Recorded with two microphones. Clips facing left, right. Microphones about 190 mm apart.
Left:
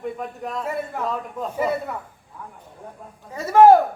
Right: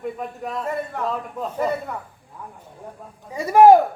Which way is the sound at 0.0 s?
Centre (ahead or behind).